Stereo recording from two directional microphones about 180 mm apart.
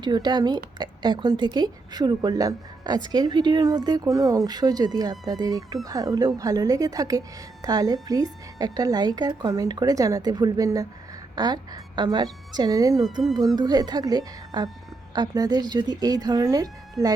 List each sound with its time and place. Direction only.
0.0 s a woman's voice: 25° right (ahead or behind)